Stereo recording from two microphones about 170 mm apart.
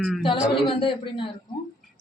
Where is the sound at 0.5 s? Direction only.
30° left (ahead or behind).